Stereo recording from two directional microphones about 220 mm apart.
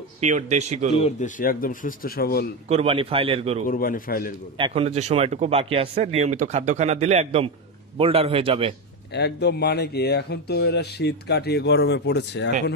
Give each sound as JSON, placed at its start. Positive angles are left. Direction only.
{"t": 0.2, "sound": "speech", "side_deg": -30}
{"t": 0.9, "sound": "speech", "side_deg": 30}
{"t": 1.4, "sound": "speech", "side_deg": 40}
{"t": 2.7, "sound": "speech", "side_deg": -25}
{"t": 3.6, "sound": "speech", "side_deg": 40}
{"t": 4.6, "sound": "speech", "side_deg": -25}
{"t": 9.1, "sound": "speech", "side_deg": 50}